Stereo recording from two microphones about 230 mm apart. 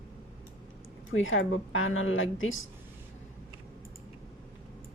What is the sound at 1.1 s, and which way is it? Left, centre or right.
Speech, left.